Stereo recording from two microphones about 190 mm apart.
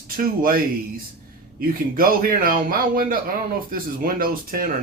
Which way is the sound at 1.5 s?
50° right (ahead or behind).